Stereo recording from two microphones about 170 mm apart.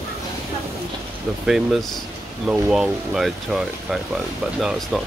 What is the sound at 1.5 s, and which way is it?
Speech, centre (ahead or behind).